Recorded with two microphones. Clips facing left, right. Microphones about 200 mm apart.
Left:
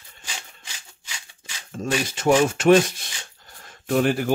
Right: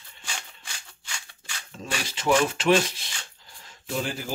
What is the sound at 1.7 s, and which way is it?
Filing, 45° left (ahead or behind).